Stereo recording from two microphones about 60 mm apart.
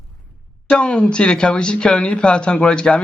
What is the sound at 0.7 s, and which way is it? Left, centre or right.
Speech, centre.